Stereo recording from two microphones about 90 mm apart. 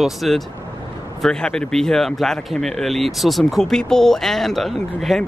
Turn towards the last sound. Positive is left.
turn(degrees=0)  # may be behind; listen again after turning